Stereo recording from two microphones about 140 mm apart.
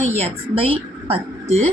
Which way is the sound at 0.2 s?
45° right (ahead or behind).